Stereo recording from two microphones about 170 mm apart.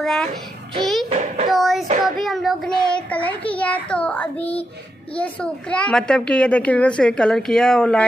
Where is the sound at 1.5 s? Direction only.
Centre (ahead or behind).